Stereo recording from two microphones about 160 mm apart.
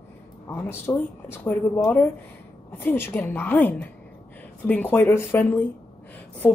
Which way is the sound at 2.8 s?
15° left (ahead or behind).